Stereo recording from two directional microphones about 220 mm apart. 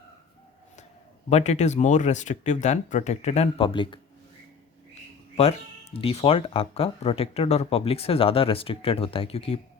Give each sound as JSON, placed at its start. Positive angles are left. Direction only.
{"t": 1.3, "sound": "speech", "side_deg": 30}
{"t": 5.4, "sound": "speech", "side_deg": 25}